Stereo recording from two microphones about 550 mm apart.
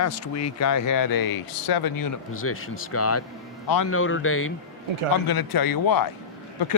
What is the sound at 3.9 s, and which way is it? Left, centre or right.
Speech, left.